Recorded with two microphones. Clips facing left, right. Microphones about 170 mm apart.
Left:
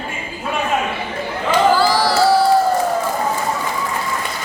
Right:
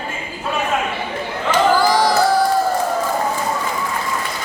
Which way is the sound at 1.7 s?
15° right (ahead or behind).